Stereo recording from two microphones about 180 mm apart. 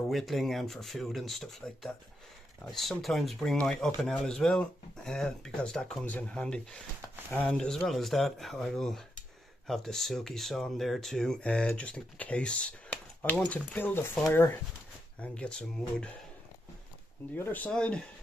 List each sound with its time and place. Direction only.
0.1 s speech: centre (ahead or behind)
17.4 s speech: 10° left (ahead or behind)